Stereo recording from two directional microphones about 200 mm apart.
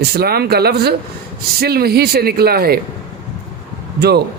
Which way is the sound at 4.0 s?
55° right (ahead or behind).